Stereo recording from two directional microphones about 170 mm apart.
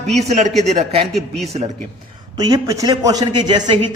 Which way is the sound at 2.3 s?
20° right (ahead or behind).